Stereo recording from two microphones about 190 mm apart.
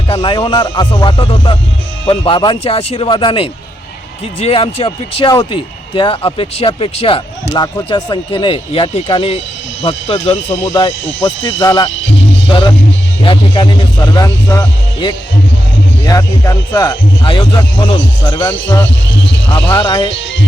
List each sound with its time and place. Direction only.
0.1 s speech: 25° left (ahead or behind)
10.5 s speech: 15° left (ahead or behind)
19.1 s vehicle: 70° left (ahead or behind)
19.7 s speech: 20° left (ahead or behind)